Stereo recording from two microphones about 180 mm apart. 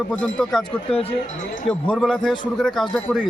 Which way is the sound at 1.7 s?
5° left (ahead or behind).